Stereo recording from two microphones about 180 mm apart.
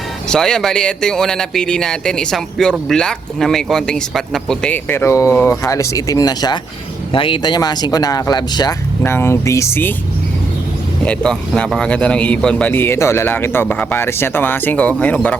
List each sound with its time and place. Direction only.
0.3 s a man's voice: 5° left (ahead or behind)
11.0 s a man's voice: 5° left (ahead or behind)